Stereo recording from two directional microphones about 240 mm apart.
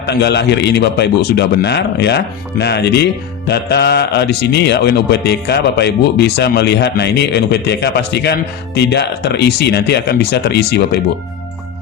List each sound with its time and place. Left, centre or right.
0.0 s a man's voice: left